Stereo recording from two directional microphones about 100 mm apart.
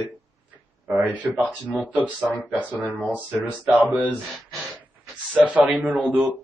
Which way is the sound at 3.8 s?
15° right (ahead or behind).